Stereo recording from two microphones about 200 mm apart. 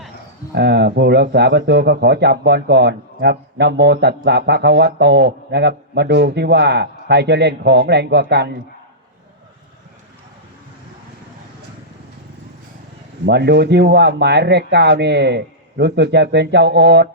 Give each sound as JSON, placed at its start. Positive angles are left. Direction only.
{"t": 0.5, "sound": "speech", "side_deg": -55}
{"t": 13.2, "sound": "speech", "side_deg": -55}